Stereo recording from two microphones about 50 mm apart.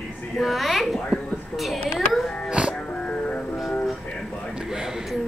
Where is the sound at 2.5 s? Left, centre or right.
Right.